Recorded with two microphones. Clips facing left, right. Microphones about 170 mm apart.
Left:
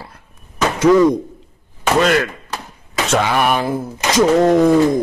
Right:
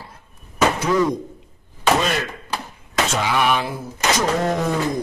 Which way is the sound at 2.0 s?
75° left (ahead or behind).